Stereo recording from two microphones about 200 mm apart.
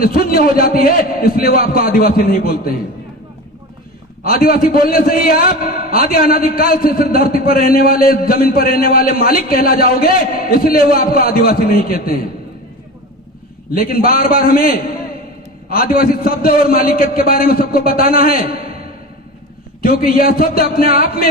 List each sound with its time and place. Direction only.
0.0 s a man's voice: 45° left (ahead or behind)
4.2 s a man's voice: 45° left (ahead or behind)
13.7 s a man's voice: 45° left (ahead or behind)
19.8 s a man's voice: 45° left (ahead or behind)